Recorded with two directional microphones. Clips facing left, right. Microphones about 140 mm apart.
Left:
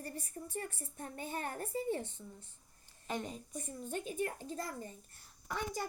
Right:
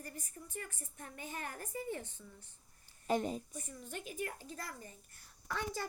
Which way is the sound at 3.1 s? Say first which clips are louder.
Right 6 dB; 40° right (ahead or behind).